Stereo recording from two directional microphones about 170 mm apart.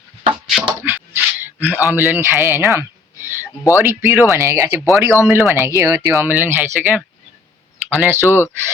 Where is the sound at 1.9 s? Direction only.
10° right (ahead or behind).